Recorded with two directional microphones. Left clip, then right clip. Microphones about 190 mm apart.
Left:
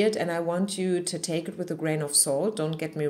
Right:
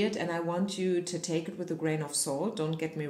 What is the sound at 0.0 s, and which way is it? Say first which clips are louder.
Speech: left 6 dB; 50° left (ahead or behind).